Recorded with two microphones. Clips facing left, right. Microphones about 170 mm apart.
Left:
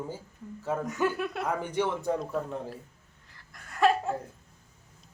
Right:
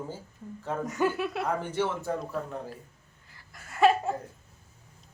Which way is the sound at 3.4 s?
5° right (ahead or behind).